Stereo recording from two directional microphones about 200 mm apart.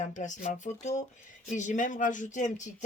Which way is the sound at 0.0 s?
40° left (ahead or behind).